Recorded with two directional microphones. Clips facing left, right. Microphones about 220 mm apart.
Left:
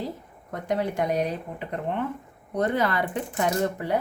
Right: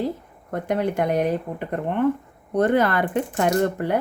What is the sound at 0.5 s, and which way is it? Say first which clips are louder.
Speech: right 4 dB; 55° right (ahead or behind).